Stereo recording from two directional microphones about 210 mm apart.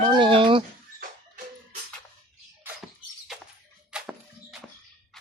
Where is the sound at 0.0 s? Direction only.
25° right (ahead or behind).